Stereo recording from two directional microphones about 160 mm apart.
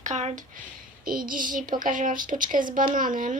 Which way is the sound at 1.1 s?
60° right (ahead or behind).